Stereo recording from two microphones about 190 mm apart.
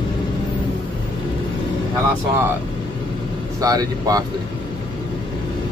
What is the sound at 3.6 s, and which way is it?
Speech, 20° right (ahead or behind).